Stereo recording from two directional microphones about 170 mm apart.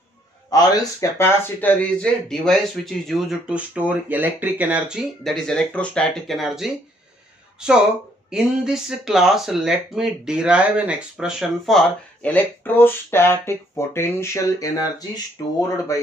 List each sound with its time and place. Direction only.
0.5 s speech: 20° left (ahead or behind)